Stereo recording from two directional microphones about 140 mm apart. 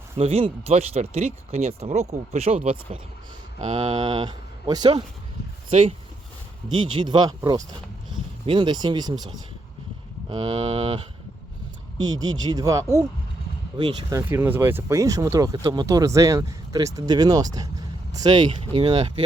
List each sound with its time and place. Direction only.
0.2 s speech: 45° right (ahead or behind)
3.9 s speech: 35° right (ahead or behind)
6.7 s speech: 35° right (ahead or behind)
10.2 s speech: 40° right (ahead or behind)
11.9 s speech: 25° right (ahead or behind)
14.1 s speech: 20° right (ahead or behind); by 19.1 s 35° right (ahead or behind)